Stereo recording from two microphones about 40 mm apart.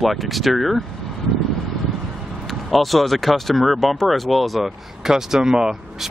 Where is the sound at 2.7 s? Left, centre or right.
Centre.